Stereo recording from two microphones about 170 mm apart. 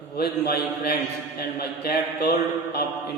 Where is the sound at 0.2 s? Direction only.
70° left (ahead or behind).